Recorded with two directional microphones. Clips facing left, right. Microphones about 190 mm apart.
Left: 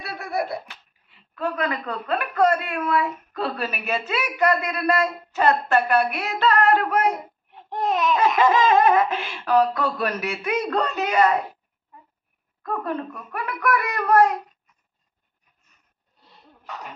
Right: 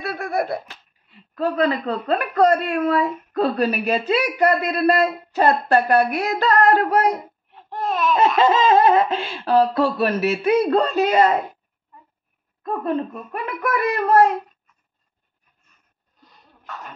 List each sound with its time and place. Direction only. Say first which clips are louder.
0.0 s laughter: right 4 dB; 50° right (ahead or behind)
1.3 s a woman's voice: right 6 dB; 35° right (ahead or behind)
7.5 s a sound: left 1 dB; 15° left (ahead or behind)
8.4 s speech: right 2 dB; 30° right (ahead or behind)
12.6 s speech: right 4 dB; 20° right (ahead or behind)
16.2 s a sound: even; 30° left (ahead or behind)
16.6 s beatboxing: even; 15° left (ahead or behind)